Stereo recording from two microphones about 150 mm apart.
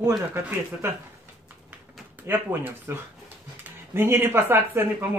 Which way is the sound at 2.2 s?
15° right (ahead or behind).